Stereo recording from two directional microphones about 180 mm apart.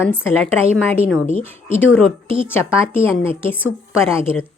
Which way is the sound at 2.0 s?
10° left (ahead or behind).